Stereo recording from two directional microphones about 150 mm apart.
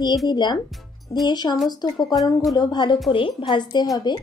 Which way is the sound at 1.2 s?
30° left (ahead or behind).